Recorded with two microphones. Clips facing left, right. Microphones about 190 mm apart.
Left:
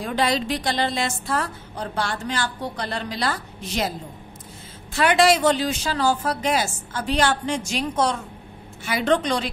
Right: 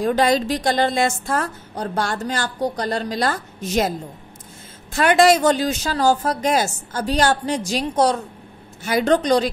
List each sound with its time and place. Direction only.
0.0 s a woman's voice: 45° right (ahead or behind)
4.9 s a woman's voice: 45° right (ahead or behind)